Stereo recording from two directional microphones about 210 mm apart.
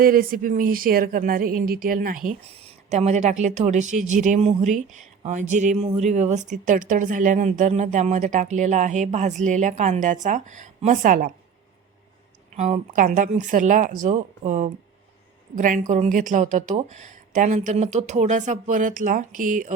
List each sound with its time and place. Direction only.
0.0 s speech: 45° right (ahead or behind)
2.5 s speech: 30° right (ahead or behind)
12.5 s speech: 35° right (ahead or behind)